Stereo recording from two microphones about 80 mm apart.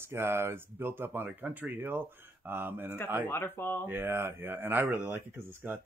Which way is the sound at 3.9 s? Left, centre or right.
Right.